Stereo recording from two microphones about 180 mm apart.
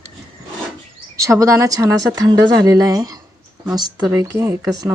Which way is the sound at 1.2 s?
20° right (ahead or behind).